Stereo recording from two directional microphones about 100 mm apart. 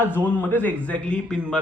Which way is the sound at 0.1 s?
15° right (ahead or behind).